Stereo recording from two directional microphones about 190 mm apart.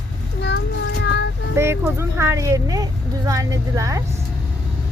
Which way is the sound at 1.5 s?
15° right (ahead or behind).